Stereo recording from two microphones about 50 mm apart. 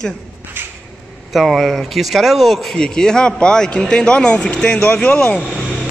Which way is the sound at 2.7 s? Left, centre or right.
Centre.